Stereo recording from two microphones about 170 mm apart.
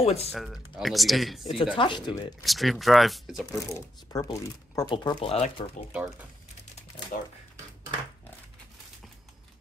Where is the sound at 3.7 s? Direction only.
20° left (ahead or behind).